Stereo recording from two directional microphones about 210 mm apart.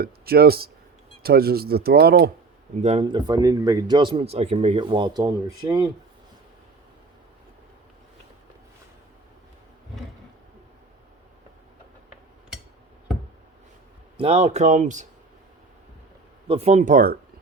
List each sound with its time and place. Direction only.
0.0 s speech: 45° right (ahead or behind)
2.8 s speech: 25° right (ahead or behind)
14.2 s speech: 30° right (ahead or behind)
16.5 s speech: 30° right (ahead or behind)